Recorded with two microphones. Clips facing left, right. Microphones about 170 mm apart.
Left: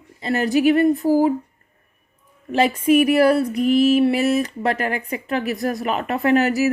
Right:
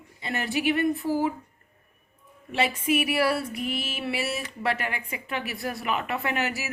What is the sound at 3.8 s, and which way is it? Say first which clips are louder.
Speech: left 15 dB; 40° left (ahead or behind).